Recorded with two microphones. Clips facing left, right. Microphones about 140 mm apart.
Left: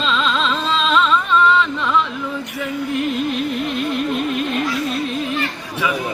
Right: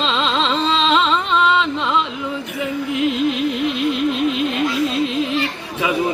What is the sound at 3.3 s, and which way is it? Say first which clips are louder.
Music: right 1 dB; 15° right (ahead or behind).